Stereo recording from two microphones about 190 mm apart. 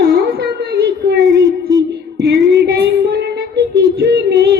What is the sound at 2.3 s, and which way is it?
Child singing, 60° right (ahead or behind).